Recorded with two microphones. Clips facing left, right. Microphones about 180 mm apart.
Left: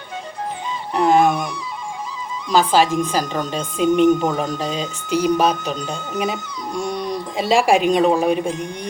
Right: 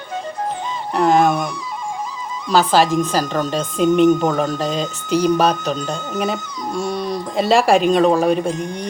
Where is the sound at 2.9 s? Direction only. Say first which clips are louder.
Right 2 dB; 45° right (ahead or behind).